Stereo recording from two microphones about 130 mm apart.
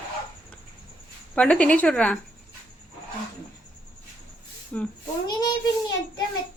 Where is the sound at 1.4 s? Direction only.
10° left (ahead or behind).